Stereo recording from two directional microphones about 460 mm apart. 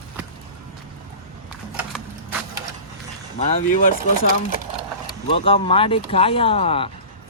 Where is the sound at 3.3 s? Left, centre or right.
Centre.